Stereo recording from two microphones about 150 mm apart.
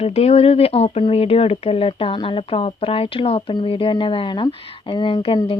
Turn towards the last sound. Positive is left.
turn(degrees=35)  # may be behind; listen again after turning